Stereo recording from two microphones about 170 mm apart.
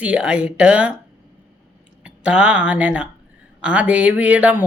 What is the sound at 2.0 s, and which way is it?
Speech, 5° right (ahead or behind).